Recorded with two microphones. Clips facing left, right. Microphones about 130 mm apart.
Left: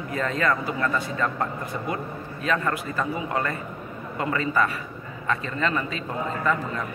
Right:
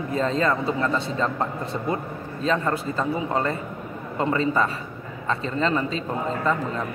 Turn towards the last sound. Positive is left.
turn(degrees=-35)  # may be behind; listen again after turning